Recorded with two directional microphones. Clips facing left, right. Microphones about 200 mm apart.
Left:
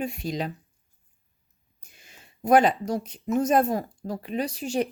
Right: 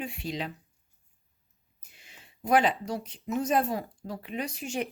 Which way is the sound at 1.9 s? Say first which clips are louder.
Left 2 dB; 45° left (ahead or behind).